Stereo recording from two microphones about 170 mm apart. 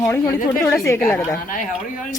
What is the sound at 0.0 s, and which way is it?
Speech, 15° left (ahead or behind).